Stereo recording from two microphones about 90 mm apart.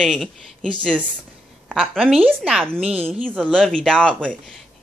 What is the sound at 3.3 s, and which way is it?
Speech, 15° right (ahead or behind).